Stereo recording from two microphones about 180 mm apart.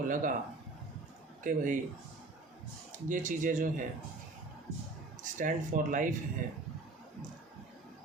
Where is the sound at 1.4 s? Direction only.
45° right (ahead or behind).